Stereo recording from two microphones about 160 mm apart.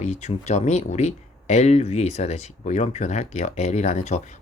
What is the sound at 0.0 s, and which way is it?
Speech, 45° left (ahead or behind).